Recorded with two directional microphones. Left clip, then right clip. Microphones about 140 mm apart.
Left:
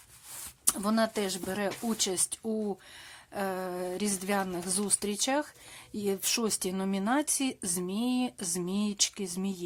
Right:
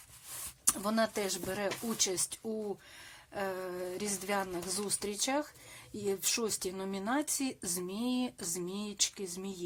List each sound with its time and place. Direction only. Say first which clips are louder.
0.6 s a woman's voice: left 3 dB; 25° left (ahead or behind)